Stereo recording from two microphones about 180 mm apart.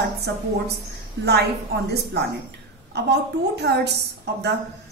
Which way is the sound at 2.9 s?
65° right (ahead or behind).